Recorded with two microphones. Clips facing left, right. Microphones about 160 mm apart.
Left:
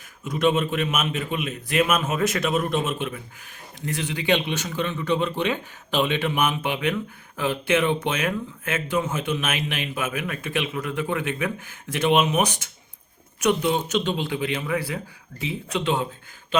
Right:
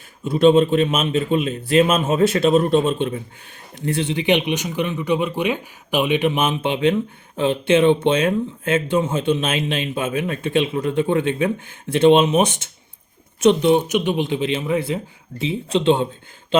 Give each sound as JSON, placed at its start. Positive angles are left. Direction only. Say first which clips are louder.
{"t": 0.3, "sound": "a man's voice", "louder": "right 8 dB", "side_deg": -30}